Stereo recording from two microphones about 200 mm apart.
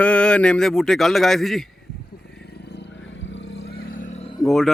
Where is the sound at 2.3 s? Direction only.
55° left (ahead or behind); by 4.3 s 35° left (ahead or behind).